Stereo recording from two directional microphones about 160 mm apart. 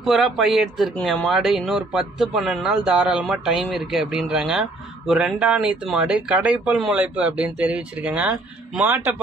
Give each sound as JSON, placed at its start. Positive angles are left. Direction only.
{"t": 0.0, "sound": "speech", "side_deg": 0}